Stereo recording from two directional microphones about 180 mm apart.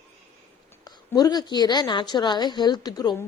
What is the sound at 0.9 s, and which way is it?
A woman's voice, 20° left (ahead or behind).